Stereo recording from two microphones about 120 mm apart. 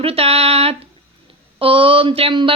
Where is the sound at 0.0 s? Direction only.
55° right (ahead or behind).